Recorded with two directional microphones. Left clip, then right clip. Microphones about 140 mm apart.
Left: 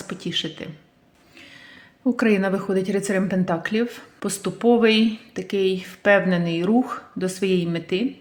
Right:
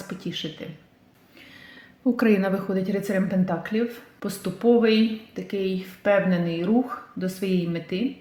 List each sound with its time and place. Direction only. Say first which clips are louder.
0.1 s speech: left 7 dB; 30° left (ahead or behind)
2.0 s a woman's voice: left 1 dB; 15° left (ahead or behind)